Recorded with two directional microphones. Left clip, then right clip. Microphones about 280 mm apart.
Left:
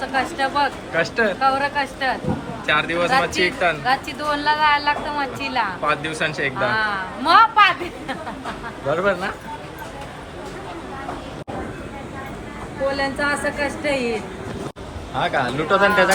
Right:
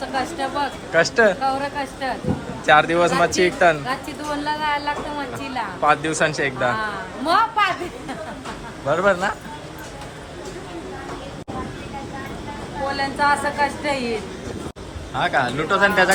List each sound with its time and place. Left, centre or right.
0.1 s a woman's voice: centre
13.0 s a woman's voice: right
15.1 s a woman's voice: centre